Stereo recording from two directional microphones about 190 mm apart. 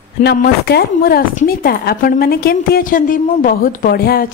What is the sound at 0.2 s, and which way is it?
Speech, 60° left (ahead or behind).